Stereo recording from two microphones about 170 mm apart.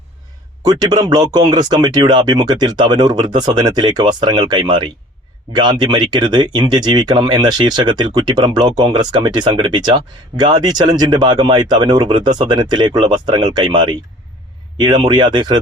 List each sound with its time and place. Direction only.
0.7 s speech: 25° right (ahead or behind)